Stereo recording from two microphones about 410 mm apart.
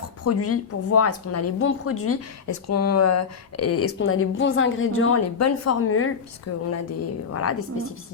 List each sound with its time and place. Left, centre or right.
0.3 s speech: left